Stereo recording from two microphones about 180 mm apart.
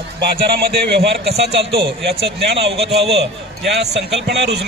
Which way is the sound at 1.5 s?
30° right (ahead or behind).